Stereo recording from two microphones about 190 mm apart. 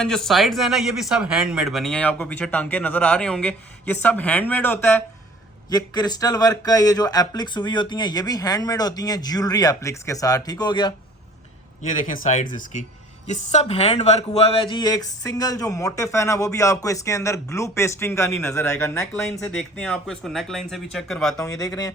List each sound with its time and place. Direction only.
0.0 s speech: 5° left (ahead or behind); by 10.9 s 20° left (ahead or behind)
12.0 s speech: 40° left (ahead or behind); by 18.7 s 15° left (ahead or behind)
19.2 s speech: 5° left (ahead or behind)
21.3 s speech: 20° left (ahead or behind)